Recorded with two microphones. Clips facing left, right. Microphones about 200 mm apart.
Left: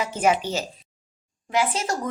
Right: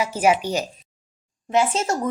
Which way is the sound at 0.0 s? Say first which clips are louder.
Right 2 dB; 10° right (ahead or behind).